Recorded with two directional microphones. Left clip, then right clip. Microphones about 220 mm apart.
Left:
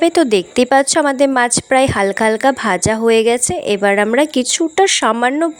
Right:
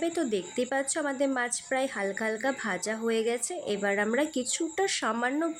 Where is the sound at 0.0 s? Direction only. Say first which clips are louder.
Left 17 dB; 45° left (ahead or behind).